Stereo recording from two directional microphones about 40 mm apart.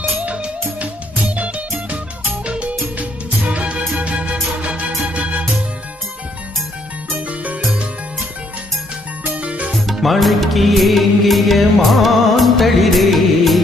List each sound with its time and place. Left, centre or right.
0.8 s music: right
2.4 s music: right
7.3 s music: right
9.4 s music: right
9.8 s music: centre